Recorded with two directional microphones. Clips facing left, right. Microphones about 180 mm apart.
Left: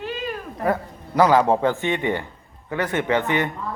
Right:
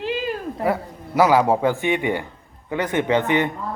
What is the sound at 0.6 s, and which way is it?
A man's voice, 10° right (ahead or behind).